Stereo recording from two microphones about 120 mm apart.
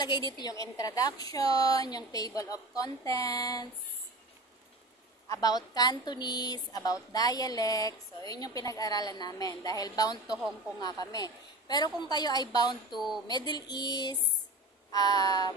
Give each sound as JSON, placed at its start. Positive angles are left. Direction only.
{"t": 0.4, "sound": "a woman's voice", "side_deg": 30}
{"t": 5.3, "sound": "a woman's voice", "side_deg": 35}
{"t": 12.9, "sound": "speech", "side_deg": 0}
{"t": 13.3, "sound": "a woman's voice", "side_deg": 35}